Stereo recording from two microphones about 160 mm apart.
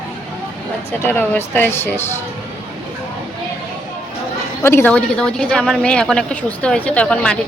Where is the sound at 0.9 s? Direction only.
15° left (ahead or behind).